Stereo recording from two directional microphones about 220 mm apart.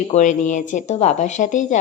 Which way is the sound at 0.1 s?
35° left (ahead or behind).